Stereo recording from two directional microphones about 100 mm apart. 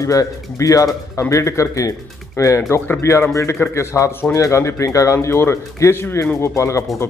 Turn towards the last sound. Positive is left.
turn(degrees=30)  # may be behind; listen again after turning